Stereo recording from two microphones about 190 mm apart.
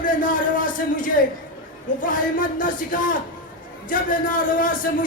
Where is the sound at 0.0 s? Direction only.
45° left (ahead or behind).